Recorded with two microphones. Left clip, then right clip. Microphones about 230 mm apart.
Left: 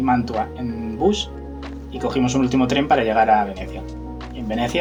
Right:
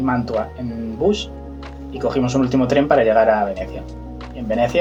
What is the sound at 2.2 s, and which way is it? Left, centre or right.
Speech, left.